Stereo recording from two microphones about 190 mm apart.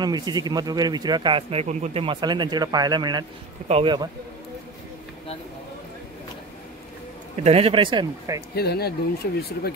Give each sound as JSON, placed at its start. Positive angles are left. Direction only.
{"t": 0.0, "sound": "speech", "side_deg": -20}
{"t": 7.4, "sound": "speech", "side_deg": -30}
{"t": 8.5, "sound": "speech", "side_deg": 55}